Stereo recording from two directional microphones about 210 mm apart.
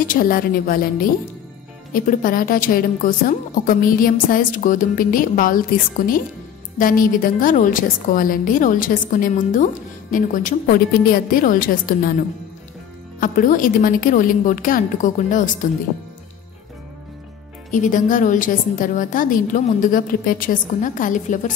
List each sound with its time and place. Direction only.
0.0 s a woman's voice: 40° left (ahead or behind)
2.0 s a woman's voice: 40° left (ahead or behind)
13.2 s a woman's voice: 40° left (ahead or behind)
17.6 s a woman's voice: 35° left (ahead or behind)